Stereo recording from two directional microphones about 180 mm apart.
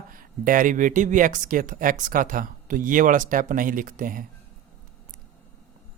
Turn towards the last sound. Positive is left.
turn(degrees=-50)  # may be behind; listen again after turning